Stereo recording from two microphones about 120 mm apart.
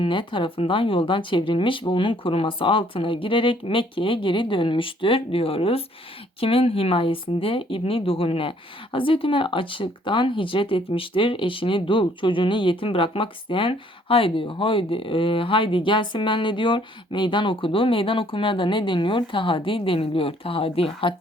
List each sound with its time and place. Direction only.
0.0 s speech: 45° left (ahead or behind)